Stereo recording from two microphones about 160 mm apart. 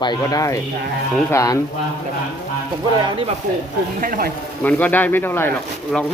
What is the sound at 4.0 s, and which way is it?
Speech, 65° right (ahead or behind).